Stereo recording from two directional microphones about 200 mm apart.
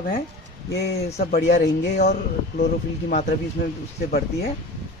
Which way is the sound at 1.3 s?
55° left (ahead or behind).